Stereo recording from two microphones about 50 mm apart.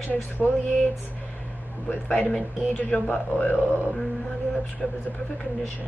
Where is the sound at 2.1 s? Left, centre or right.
Centre.